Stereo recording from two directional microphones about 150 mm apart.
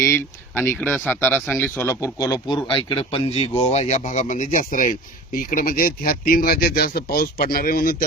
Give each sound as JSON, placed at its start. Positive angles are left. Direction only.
{"t": 0.0, "sound": "speech", "side_deg": 15}
{"t": 2.5, "sound": "speech", "side_deg": 35}